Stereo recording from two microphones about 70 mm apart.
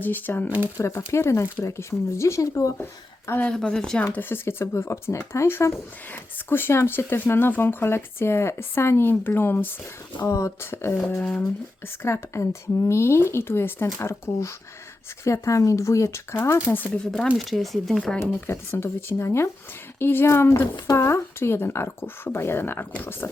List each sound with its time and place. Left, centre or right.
0.0 s speech: left
0.8 s speech: left
3.5 s speech: centre
4.0 s speech: left
10.2 s speech: left
11.2 s speech: left
12.0 s speech: left
16.6 s speech: left
17.3 s speech: centre
18.4 s speech: left